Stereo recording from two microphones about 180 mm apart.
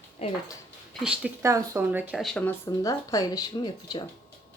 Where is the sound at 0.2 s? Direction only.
35° left (ahead or behind).